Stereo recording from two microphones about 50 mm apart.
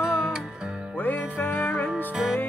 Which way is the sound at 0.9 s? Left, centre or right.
Left.